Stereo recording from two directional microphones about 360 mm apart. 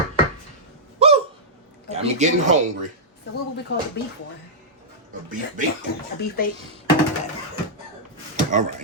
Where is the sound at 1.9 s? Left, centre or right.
Centre.